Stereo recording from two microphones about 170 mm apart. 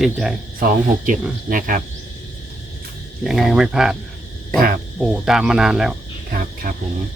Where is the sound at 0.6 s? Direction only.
50° right (ahead or behind).